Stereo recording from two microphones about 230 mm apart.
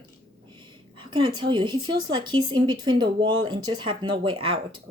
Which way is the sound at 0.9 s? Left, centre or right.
Right.